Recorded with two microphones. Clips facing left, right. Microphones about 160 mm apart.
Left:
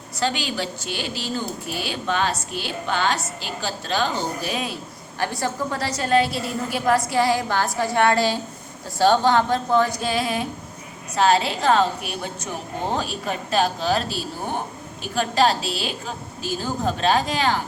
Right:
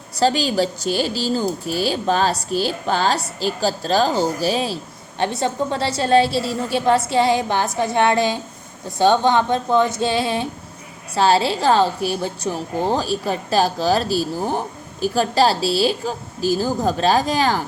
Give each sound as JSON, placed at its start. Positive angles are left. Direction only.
{"t": 0.2, "sound": "a woman's voice", "side_deg": -35}